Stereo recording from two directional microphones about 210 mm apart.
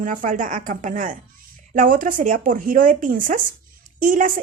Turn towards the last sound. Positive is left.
turn(degrees=-40)  # may be behind; listen again after turning